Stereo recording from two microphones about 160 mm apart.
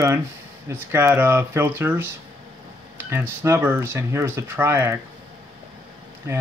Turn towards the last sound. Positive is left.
turn(degrees=-15)  # may be behind; listen again after turning